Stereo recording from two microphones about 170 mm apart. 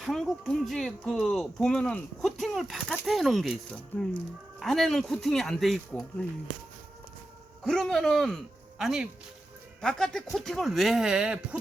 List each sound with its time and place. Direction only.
0.0 s speech: centre (ahead or behind)
7.6 s speech: 5° left (ahead or behind)